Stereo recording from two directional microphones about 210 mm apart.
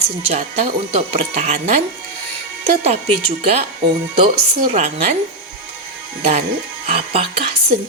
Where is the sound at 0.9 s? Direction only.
35° right (ahead or behind).